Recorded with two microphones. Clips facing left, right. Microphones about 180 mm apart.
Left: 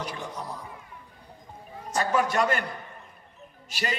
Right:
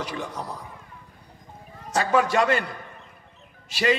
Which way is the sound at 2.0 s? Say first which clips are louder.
Right 3 dB; 90° right.